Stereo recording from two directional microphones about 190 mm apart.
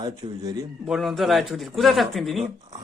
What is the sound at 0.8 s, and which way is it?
Speech, centre (ahead or behind).